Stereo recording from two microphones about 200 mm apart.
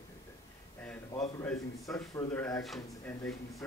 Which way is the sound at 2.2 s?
15° left (ahead or behind).